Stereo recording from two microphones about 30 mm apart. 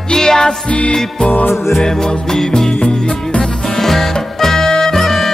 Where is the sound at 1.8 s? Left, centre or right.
Centre.